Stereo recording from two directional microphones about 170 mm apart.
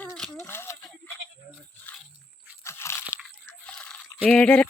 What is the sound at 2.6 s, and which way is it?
Crunch, 15° left (ahead or behind).